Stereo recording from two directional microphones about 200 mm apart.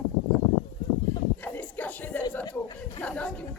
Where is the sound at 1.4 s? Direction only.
10° left (ahead or behind).